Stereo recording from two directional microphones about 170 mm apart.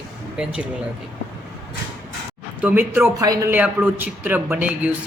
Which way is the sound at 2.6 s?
10° right (ahead or behind).